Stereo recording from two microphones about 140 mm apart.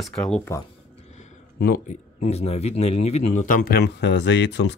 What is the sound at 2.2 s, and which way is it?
Speech, 50° left (ahead or behind).